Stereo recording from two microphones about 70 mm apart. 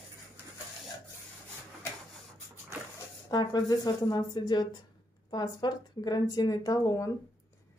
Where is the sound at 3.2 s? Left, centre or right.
Left.